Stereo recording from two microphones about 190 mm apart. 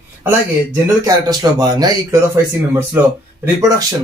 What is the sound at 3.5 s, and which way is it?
Speech, 15° right (ahead or behind).